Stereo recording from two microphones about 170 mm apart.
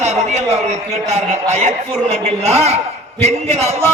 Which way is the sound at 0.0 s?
40° right (ahead or behind).